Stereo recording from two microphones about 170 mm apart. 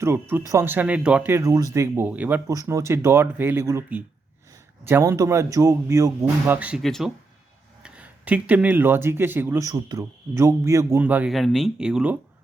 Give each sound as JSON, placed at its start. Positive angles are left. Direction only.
{"t": 0.0, "sound": "speech", "side_deg": -15}
{"t": 6.5, "sound": "speech", "side_deg": -10}